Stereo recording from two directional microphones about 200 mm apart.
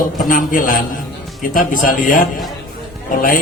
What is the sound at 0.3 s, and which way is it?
A man's voice, 40° left (ahead or behind).